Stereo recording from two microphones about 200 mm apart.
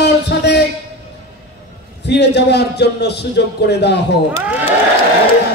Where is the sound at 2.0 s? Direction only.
55° left (ahead or behind).